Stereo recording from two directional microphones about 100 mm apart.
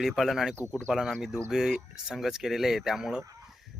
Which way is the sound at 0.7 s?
10° left (ahead or behind).